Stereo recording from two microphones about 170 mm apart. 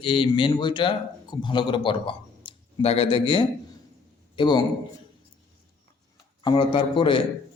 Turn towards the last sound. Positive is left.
turn(degrees=30)  # may be behind; listen again after turning